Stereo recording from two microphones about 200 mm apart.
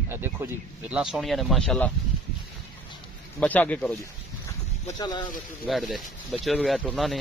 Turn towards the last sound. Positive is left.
turn(degrees=5)  # may be behind; listen again after turning